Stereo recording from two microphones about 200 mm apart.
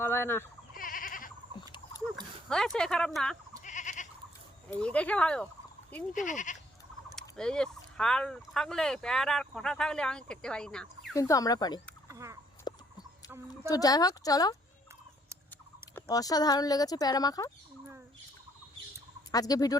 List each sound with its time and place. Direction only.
0.0 s speech: 10° left (ahead or behind)
0.7 s goat: 45° left (ahead or behind)
1.5 s a sound: 25° left (ahead or behind)
2.5 s speech: 5° left (ahead or behind)
3.6 s goat: 40° left (ahead or behind)
4.7 s speech: 5° left (ahead or behind)
6.1 s speech: 40° left (ahead or behind)
7.2 s speech: 5° left (ahead or behind)
11.1 s a woman's voice: 15° left (ahead or behind)
12.0 s a sound: 15° right (ahead or behind)
12.7 s fowl: 20° left (ahead or behind)
13.7 s a woman's voice: 20° left (ahead or behind)
16.0 s speech: 20° left (ahead or behind)
19.3 s speech: 20° left (ahead or behind)